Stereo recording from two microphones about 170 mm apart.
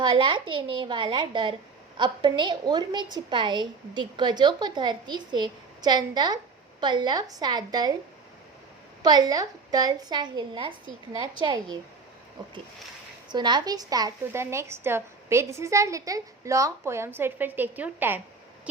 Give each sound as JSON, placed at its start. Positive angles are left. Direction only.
{"t": 0.0, "sound": "a woman's voice", "side_deg": -25}
{"t": 9.0, "sound": "a woman's voice", "side_deg": -25}
{"t": 13.2, "sound": "a woman's voice", "side_deg": -25}